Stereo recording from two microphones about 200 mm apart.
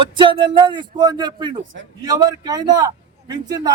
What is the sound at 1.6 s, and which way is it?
Speech, 70° right (ahead or behind).